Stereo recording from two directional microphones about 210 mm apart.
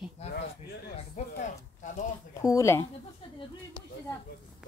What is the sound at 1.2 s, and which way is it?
Speech, 35° left (ahead or behind).